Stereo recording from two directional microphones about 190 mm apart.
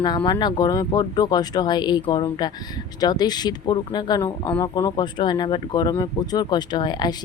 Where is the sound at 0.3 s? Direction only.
20° left (ahead or behind).